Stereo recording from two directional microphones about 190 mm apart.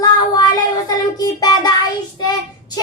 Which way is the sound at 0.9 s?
20° left (ahead or behind).